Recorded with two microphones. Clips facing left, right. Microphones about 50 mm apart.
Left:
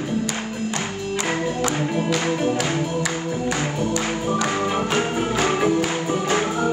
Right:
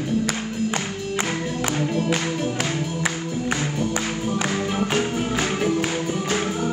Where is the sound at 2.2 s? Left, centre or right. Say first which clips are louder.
Left 4 dB; left.